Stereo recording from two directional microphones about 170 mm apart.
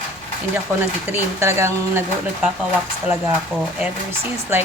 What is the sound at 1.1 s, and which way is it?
Speech, 15° right (ahead or behind).